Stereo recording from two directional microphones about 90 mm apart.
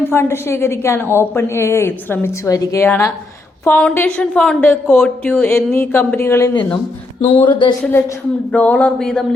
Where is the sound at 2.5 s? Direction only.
40° left (ahead or behind).